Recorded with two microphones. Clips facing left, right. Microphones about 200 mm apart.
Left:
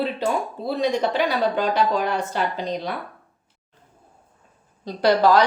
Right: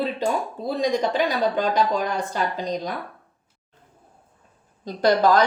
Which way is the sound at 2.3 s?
40° right (ahead or behind).